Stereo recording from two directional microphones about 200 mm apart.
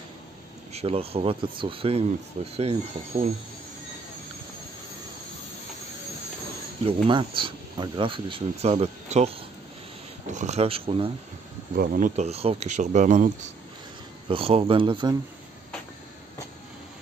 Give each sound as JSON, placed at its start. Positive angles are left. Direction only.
{"t": 0.7, "sound": "speech", "side_deg": -30}
{"t": 6.9, "sound": "speech", "side_deg": -25}
{"t": 10.3, "sound": "speech", "side_deg": -35}
{"t": 11.7, "sound": "speech", "side_deg": -45}
{"t": 14.2, "sound": "speech", "side_deg": -25}